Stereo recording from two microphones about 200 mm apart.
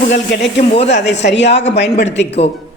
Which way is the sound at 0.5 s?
30° left (ahead or behind).